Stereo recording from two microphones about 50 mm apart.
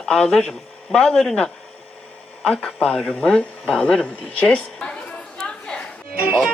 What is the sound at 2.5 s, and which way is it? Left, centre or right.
Speech, left.